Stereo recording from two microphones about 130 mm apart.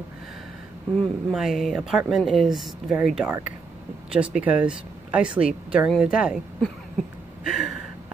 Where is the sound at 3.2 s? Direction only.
15° right (ahead or behind).